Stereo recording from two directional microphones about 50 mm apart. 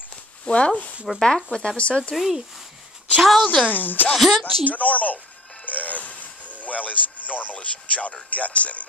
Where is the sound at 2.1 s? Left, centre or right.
Centre.